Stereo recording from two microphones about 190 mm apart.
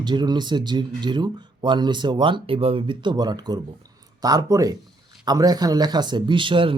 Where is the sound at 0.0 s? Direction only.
25° right (ahead or behind).